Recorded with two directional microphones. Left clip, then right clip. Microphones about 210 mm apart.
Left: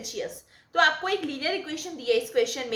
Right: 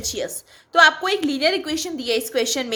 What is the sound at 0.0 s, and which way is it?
A woman's voice, 55° right (ahead or behind).